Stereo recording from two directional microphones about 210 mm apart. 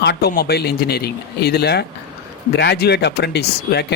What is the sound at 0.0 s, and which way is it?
Speech, 50° left (ahead or behind).